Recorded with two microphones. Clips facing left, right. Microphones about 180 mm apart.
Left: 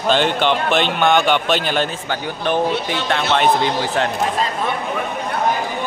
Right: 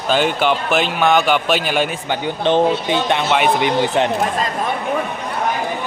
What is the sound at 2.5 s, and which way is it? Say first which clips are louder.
A man's voice: right 4 dB; 20° right (ahead or behind).